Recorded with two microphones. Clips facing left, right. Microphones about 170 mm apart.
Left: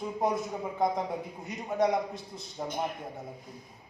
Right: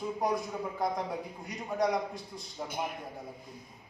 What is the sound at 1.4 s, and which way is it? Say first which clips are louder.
Speech: left 3 dB; 25° left (ahead or behind).